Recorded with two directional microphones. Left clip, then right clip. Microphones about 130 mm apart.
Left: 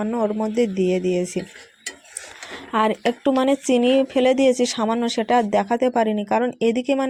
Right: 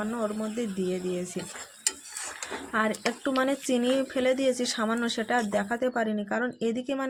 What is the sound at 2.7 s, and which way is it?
Speech, 45° left (ahead or behind).